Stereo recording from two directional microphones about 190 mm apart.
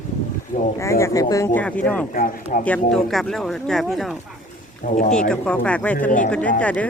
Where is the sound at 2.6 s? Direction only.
5° left (ahead or behind).